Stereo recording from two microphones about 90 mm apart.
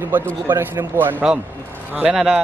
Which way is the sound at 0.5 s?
25° right (ahead or behind).